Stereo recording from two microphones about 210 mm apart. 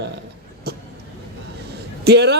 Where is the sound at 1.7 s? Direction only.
50° right (ahead or behind).